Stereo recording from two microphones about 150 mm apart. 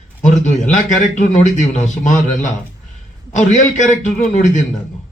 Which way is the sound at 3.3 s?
55° left (ahead or behind).